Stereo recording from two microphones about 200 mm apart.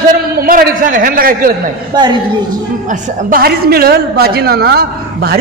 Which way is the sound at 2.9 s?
40° right (ahead or behind).